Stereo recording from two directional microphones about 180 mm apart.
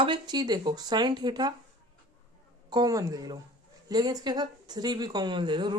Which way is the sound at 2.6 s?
20° right (ahead or behind).